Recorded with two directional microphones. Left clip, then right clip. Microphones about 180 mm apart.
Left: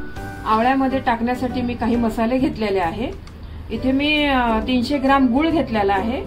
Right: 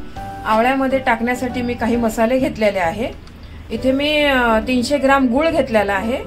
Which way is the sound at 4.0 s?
35° right (ahead or behind).